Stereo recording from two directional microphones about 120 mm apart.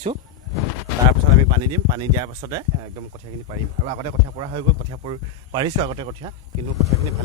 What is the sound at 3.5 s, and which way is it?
Speech, 50° right (ahead or behind).